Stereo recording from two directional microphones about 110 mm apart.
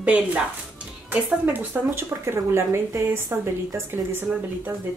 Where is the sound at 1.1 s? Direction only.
20° right (ahead or behind).